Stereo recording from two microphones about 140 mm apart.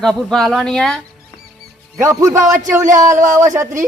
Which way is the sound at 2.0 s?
20° right (ahead or behind).